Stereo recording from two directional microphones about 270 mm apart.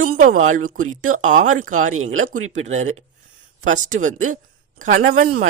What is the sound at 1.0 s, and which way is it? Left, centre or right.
Speech, right.